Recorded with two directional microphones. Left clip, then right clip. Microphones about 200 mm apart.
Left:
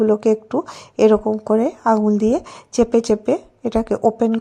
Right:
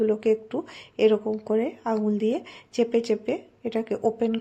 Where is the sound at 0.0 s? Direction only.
30° left (ahead or behind).